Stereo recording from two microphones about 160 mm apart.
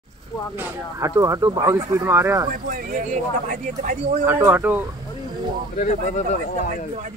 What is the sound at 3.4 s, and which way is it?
Speech, 50° right (ahead or behind).